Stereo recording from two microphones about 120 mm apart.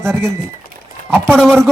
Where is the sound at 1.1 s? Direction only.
5° left (ahead or behind).